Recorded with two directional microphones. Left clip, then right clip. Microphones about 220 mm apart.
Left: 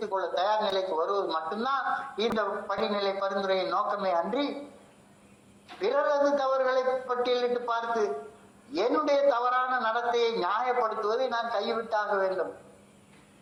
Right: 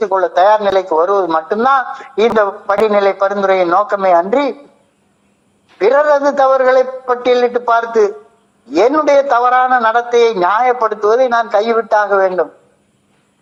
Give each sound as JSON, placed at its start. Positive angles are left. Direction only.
{"t": 0.0, "sound": "a man's voice", "side_deg": -55}
{"t": 5.8, "sound": "a man's voice", "side_deg": -55}